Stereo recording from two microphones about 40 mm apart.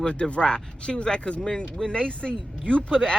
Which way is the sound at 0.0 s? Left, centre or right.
Left.